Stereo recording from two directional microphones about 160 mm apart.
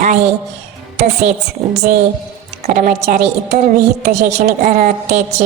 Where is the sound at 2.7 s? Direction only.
60° right (ahead or behind).